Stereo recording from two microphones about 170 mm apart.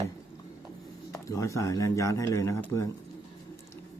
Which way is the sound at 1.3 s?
20° left (ahead or behind).